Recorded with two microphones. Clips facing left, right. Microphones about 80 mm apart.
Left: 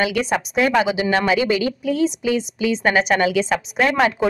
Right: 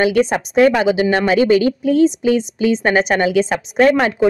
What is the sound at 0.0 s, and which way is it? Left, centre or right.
Speech, right.